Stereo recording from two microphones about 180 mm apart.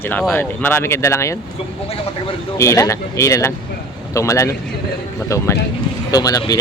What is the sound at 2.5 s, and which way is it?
Speech, 15° left (ahead or behind).